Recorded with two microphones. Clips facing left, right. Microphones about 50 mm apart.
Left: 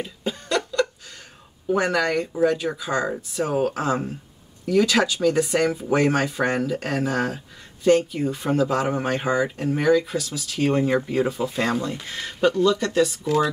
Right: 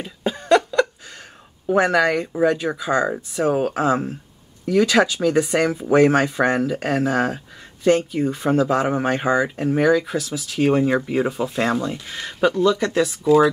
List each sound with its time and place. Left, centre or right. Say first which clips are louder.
0.0 s cough: right 3 dB; centre
1.7 s speech: right 4 dB; centre
3.7 s speech: right 4 dB; right
4.6 s speech: right 3 dB; centre
8.6 s speech: right 3 dB; centre